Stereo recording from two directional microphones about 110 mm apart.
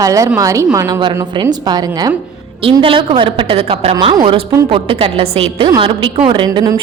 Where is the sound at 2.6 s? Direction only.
50° right (ahead or behind).